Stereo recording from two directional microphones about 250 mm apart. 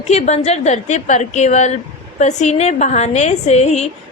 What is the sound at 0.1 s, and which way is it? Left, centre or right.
A woman's voice, left.